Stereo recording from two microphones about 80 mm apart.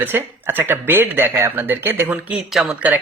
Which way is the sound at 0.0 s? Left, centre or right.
Right.